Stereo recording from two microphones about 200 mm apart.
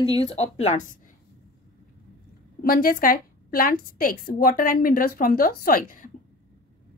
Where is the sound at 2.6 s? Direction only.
45° left (ahead or behind).